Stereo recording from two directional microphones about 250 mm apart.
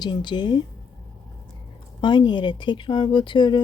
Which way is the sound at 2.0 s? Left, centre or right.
Centre.